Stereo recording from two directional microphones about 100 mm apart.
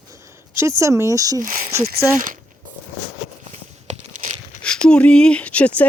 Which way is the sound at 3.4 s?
90° right.